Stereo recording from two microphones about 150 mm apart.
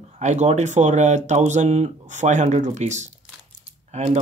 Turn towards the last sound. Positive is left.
turn(degrees=-45)  # may be behind; listen again after turning